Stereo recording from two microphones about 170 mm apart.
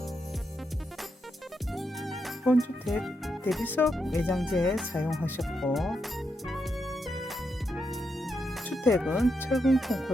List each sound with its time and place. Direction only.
1.7 s music: centre (ahead or behind)
2.8 s speech: centre (ahead or behind)
3.6 s speech: 10° left (ahead or behind)
3.8 s speech: centre (ahead or behind)
7.1 s music: centre (ahead or behind)
8.9 s speech: centre (ahead or behind)